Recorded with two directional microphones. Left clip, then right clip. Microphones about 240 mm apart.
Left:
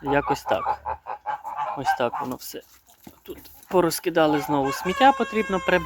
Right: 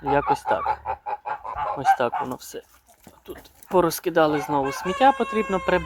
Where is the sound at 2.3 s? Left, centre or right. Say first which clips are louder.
Right 1 dB; centre.